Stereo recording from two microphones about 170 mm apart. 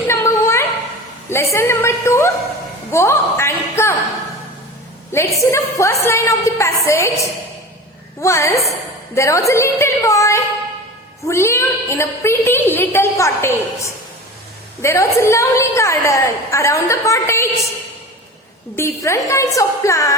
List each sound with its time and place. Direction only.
0.1 s a sound: 15° left (ahead or behind)
2.9 s a woman's voice: 15° left (ahead or behind)
5.4 s a woman's voice: 20° left (ahead or behind)
18.8 s a woman's voice: 15° left (ahead or behind)